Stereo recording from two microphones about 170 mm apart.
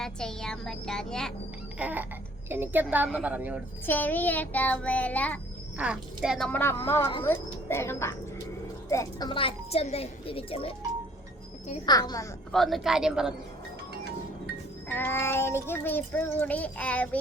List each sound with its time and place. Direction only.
0.0 s speech: 5° left (ahead or behind)
1.8 s a woman's voice: 10° right (ahead or behind)
3.8 s child singing: 10° left (ahead or behind)
5.7 s speech: 5° right (ahead or behind)
6.5 s child singing: 15° left (ahead or behind)
8.9 s speech: 20° left (ahead or behind)
11.9 s a child's voice: 20° left (ahead or behind)
12.5 s speech: centre (ahead or behind)
14.8 s child singing: 10° left (ahead or behind)